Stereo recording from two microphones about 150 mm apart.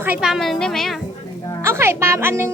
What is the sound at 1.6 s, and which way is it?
Speech, 15° right (ahead or behind).